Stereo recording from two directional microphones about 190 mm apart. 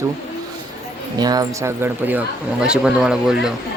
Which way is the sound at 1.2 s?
20° right (ahead or behind).